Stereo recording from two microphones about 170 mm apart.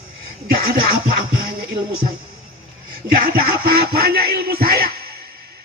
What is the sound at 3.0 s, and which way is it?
Music, 60° right (ahead or behind).